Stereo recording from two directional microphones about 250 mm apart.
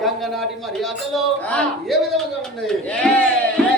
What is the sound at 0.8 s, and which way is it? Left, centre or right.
Speech, centre.